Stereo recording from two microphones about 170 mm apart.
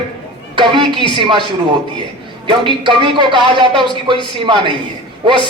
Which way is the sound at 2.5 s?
30° right (ahead or behind).